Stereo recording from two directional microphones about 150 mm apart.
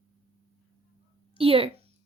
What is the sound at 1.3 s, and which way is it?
Speech, 40° right (ahead or behind).